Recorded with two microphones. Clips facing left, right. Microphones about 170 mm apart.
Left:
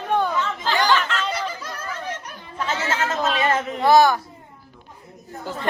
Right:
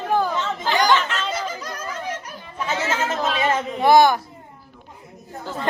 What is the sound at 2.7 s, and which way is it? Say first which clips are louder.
Speech: right 1 dB; 20° right (ahead or behind).